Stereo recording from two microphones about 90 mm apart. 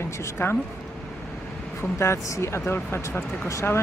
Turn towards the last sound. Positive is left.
turn(degrees=30)  # may be behind; listen again after turning